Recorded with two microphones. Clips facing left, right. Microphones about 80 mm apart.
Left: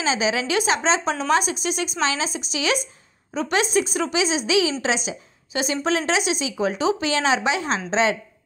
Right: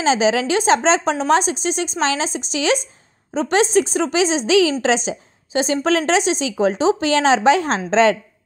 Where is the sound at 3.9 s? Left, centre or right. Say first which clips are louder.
Right 4 dB; right.